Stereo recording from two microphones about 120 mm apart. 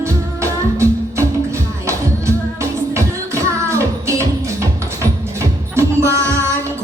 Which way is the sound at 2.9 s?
25° right (ahead or behind).